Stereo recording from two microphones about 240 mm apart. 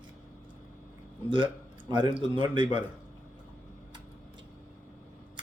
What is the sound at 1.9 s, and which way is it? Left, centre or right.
Speech, centre.